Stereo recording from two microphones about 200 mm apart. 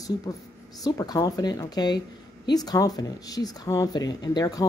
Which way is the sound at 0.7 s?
20° left (ahead or behind).